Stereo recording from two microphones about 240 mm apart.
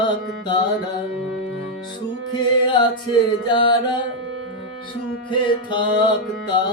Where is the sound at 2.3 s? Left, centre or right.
Centre.